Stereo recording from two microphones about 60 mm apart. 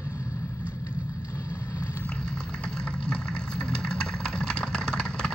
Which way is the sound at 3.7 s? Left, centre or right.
Centre.